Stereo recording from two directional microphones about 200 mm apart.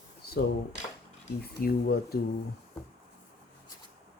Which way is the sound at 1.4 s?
50° left (ahead or behind).